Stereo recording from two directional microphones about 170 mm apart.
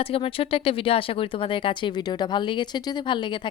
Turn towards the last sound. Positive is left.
turn(degrees=30)  # may be behind; listen again after turning